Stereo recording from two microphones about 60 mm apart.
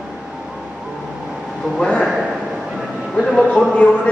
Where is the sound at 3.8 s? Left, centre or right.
Left.